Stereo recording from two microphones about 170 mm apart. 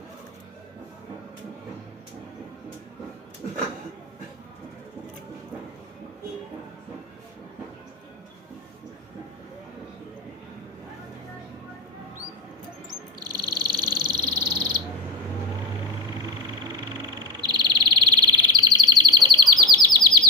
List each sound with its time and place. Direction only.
12.9 s bird: 25° right (ahead or behind)
17.4 s chirp: 25° right (ahead or behind)